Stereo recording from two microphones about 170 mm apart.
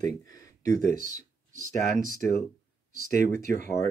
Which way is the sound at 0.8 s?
50° right (ahead or behind).